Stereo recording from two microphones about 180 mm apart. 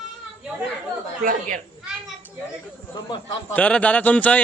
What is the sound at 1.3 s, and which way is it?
Speech, 50° right (ahead or behind).